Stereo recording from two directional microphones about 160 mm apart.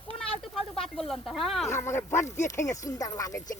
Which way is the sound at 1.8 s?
15° left (ahead or behind).